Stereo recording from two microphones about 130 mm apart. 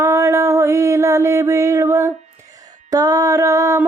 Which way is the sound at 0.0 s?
20° right (ahead or behind).